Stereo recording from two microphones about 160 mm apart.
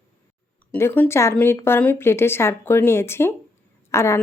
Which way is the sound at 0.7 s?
15° left (ahead or behind).